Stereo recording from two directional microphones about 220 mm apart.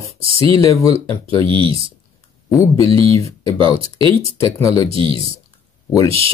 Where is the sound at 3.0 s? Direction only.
15° left (ahead or behind).